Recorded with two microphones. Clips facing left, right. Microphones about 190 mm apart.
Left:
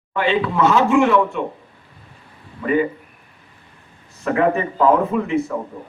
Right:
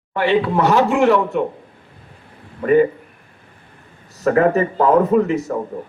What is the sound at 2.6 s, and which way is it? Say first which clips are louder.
Speech: right 5 dB; 45° right (ahead or behind).